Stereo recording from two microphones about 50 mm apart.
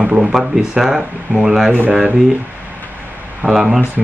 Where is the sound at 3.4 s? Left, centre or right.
Right.